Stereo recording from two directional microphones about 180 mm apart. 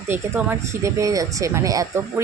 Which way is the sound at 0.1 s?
10° right (ahead or behind).